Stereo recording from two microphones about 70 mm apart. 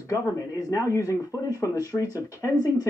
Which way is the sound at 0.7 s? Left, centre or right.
Left.